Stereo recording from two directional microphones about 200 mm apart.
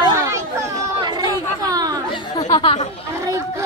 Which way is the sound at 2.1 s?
20° left (ahead or behind).